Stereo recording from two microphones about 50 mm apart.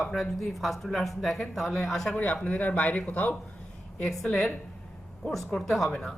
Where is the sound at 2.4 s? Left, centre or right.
Left.